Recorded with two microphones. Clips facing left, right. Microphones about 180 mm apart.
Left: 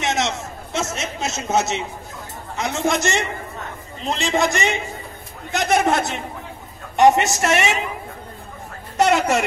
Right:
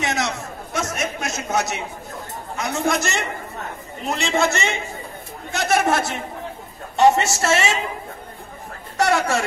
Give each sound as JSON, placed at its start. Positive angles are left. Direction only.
{"t": 0.0, "sound": "chatter", "side_deg": 20}
{"t": 2.5, "sound": "a man's voice", "side_deg": 20}
{"t": 8.9, "sound": "speech", "side_deg": 20}